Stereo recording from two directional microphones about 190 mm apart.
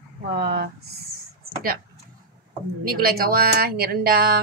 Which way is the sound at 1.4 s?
50° right (ahead or behind).